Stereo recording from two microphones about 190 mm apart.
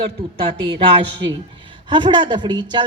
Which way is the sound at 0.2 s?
25° right (ahead or behind).